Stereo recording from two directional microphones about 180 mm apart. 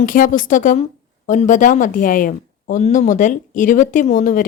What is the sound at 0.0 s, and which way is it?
A woman's voice, 50° left (ahead or behind).